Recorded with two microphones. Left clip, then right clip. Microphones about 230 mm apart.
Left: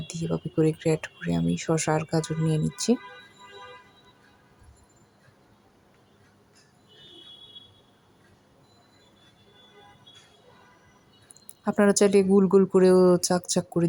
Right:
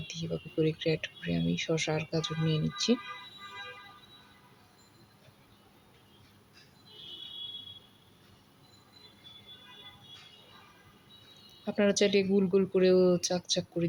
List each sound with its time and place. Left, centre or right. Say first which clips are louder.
0.6 s speech: left 5 dB; left
11.6 s speech: left 6 dB; left